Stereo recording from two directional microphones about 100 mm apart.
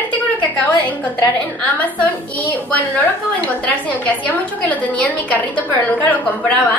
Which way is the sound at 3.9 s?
15° left (ahead or behind).